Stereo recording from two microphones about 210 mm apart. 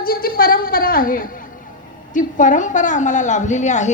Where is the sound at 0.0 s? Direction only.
45° left (ahead or behind).